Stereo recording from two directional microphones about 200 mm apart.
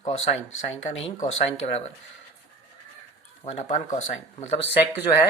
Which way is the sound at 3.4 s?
35° left (ahead or behind).